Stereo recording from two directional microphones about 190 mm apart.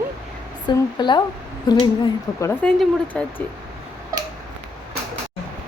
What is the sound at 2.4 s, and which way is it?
Speech, 10° left (ahead or behind).